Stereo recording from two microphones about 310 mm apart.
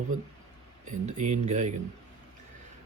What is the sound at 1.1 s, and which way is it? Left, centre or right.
Speech, right.